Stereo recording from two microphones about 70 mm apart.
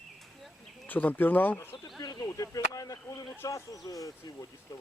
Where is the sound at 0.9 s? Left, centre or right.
Left.